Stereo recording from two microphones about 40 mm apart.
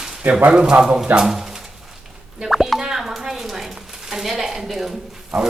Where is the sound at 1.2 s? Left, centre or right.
Centre.